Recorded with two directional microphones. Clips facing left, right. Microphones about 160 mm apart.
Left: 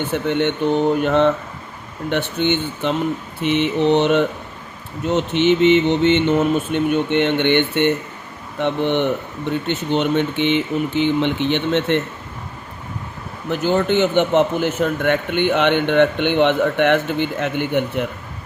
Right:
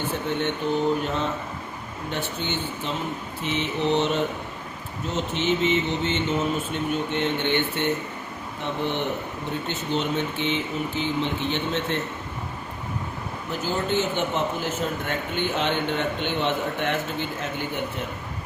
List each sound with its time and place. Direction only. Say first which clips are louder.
0.1 s a man's voice: left 7 dB; 75° left (ahead or behind)
13.5 s a man's voice: left 8 dB; 70° left (ahead or behind)